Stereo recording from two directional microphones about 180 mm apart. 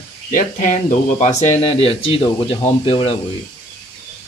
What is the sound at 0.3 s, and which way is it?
A man's voice, 45° left (ahead or behind).